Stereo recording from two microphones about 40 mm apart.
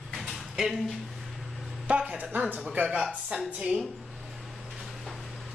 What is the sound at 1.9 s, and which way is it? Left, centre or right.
Speech, right.